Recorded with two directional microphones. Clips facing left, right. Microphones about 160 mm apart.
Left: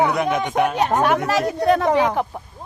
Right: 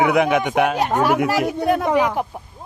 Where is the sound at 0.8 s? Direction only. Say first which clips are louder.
Even; 10° right (ahead or behind).